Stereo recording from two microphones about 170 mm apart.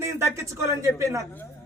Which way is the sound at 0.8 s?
15° right (ahead or behind).